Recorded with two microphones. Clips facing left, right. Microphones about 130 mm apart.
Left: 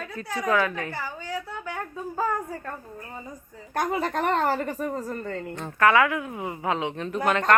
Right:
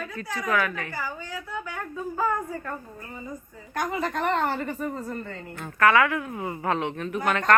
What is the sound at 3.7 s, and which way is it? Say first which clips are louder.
A woman's voice: left 2 dB; 40° left (ahead or behind).